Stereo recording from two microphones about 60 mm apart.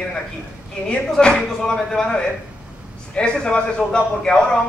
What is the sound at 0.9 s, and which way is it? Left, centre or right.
A man's voice, centre.